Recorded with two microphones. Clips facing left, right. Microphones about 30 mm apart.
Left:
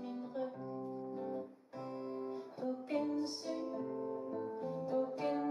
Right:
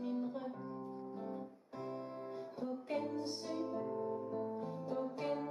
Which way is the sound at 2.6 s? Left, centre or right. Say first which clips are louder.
Left 2 dB; centre.